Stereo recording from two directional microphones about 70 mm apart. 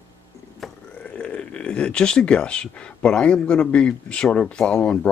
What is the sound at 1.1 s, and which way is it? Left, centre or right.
Speech, centre.